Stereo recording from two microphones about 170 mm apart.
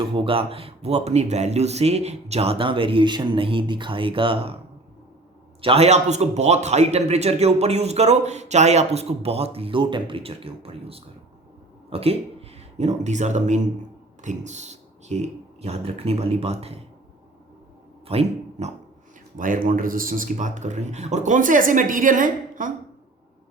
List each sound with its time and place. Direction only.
0.0 s speech: 30° right (ahead or behind)
5.6 s speech: 35° right (ahead or behind)
18.1 s dog: 35° right (ahead or behind)
19.4 s speech: 50° right (ahead or behind)